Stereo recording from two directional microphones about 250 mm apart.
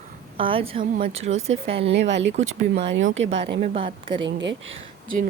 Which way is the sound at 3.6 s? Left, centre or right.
Right.